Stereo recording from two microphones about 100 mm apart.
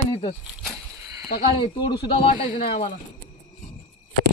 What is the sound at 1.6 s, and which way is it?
Speech, 55° left (ahead or behind).